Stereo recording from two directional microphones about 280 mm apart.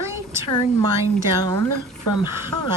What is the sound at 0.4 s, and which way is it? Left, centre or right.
A woman's voice, centre.